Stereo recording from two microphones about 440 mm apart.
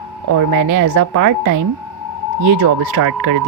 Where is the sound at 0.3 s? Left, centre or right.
Right.